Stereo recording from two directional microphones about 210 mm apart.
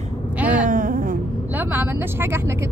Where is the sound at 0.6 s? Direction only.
40° right (ahead or behind).